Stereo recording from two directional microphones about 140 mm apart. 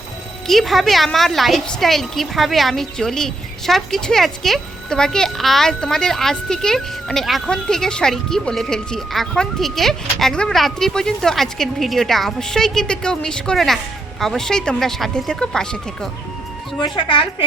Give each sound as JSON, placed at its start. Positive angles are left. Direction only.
{"t": 0.4, "sound": "a woman's voice", "side_deg": 0}
{"t": 16.8, "sound": "a woman's voice", "side_deg": 35}